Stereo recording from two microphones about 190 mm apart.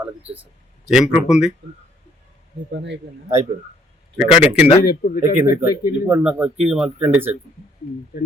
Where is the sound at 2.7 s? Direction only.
70° right (ahead or behind).